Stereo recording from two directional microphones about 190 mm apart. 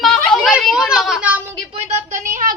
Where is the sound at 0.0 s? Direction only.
Centre (ahead or behind).